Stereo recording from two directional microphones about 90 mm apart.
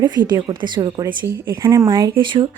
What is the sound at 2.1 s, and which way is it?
Speech, 60° right (ahead or behind).